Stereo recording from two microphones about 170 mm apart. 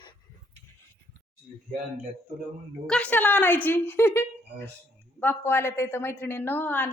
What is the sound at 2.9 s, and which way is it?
A woman's voice, 5° left (ahead or behind).